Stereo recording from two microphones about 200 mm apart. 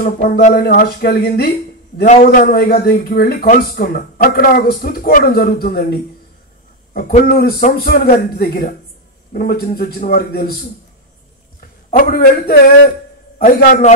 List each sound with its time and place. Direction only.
0.0 s speech: 35° left (ahead or behind)
0.6 s speech: 50° left (ahead or behind)
2.0 s speech: 35° left (ahead or behind)
2.4 s speech: 50° left (ahead or behind)
11.9 s speech: 45° left (ahead or behind)
13.6 s speech: 40° left (ahead or behind)